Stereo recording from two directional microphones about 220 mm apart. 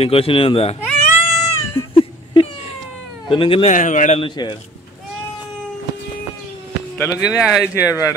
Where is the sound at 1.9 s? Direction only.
25° left (ahead or behind).